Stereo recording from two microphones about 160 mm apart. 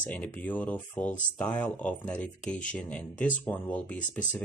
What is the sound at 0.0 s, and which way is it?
Speech, 10° left (ahead or behind).